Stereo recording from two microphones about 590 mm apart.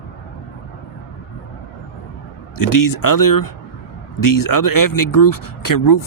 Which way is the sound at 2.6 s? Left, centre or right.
Left.